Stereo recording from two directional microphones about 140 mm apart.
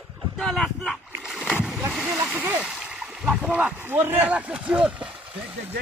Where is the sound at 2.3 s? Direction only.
10° right (ahead or behind).